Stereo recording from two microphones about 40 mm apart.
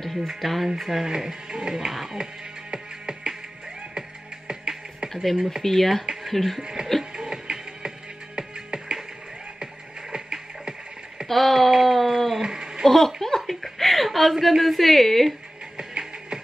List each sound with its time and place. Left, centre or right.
0.0 s music: centre
0.3 s speech: centre
1.9 s speech: centre
2.7 s music: centre
4.5 s music: centre
5.1 s speech: centre
6.6 s speech: centre
7.2 s music: right
10.1 s music: right
11.2 s a sound: centre
12.4 s a sound: centre
12.8 s a sound: centre
13.5 s a woman's voice: centre
15.8 s music: centre